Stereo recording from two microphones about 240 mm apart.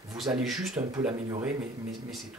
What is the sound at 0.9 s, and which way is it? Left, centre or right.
Speech, centre.